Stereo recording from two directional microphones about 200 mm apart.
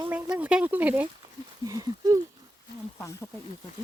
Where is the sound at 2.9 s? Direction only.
15° left (ahead or behind).